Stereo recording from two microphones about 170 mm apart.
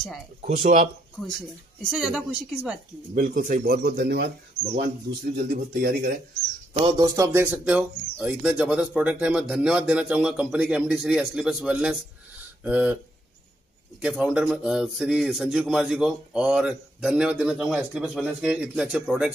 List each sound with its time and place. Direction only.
0.6 s speech: 45° right (ahead or behind)
1.9 s a man's voice: centre (ahead or behind)
3.2 s speech: 50° right (ahead or behind); by 4.3 s 75° right (ahead or behind)
5.4 s speech: 65° right (ahead or behind)
6.7 s speech: 30° right (ahead or behind)
7.1 s a man's voice: 15° right (ahead or behind)
14.0 s a man's voice: 5° right (ahead or behind)